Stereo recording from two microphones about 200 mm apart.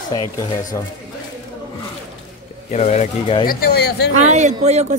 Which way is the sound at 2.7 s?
35° left (ahead or behind).